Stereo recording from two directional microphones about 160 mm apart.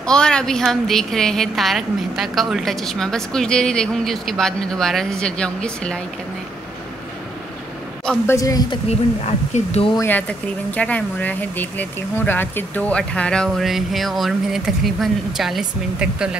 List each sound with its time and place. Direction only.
0.0 s a woman's voice: 5° left (ahead or behind)
8.3 s speech: 20° left (ahead or behind)
8.8 s speech: 40° left (ahead or behind)
9.9 s speech: 10° left (ahead or behind); by 16.3 s 5° right (ahead or behind)